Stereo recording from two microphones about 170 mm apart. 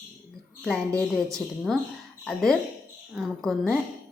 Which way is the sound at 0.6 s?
5° left (ahead or behind).